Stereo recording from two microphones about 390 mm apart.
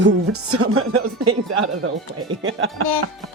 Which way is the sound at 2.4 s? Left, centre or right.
Right.